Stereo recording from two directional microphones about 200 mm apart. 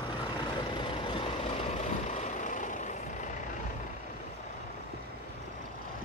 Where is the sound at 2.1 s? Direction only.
35° left (ahead or behind).